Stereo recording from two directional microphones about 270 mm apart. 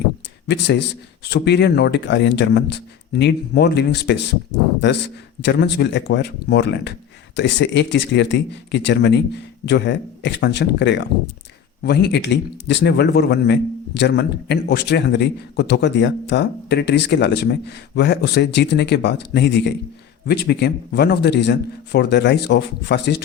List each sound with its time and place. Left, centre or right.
0.4 s a man's voice: left